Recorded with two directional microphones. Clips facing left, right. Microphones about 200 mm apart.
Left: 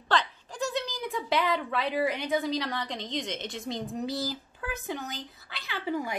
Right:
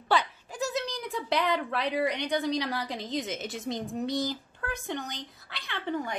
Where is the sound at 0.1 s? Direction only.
10° right (ahead or behind).